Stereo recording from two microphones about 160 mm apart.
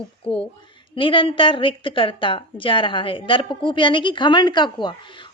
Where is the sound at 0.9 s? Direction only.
35° left (ahead or behind).